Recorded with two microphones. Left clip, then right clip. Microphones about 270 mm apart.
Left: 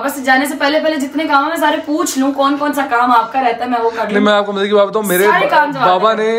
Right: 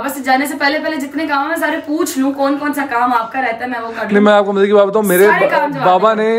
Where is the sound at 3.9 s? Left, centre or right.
Centre.